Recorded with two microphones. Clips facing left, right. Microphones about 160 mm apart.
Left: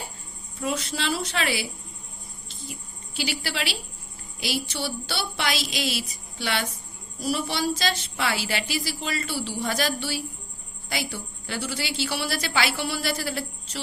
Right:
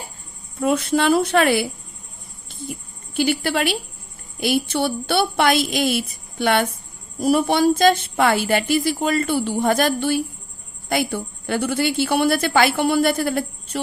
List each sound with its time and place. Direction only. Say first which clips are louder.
0.6 s speech: right 10 dB; 55° right (ahead or behind)
2.5 s a sound: right 9 dB; 55° right (ahead or behind)
3.2 s a woman's voice: right 10 dB; 50° right (ahead or behind)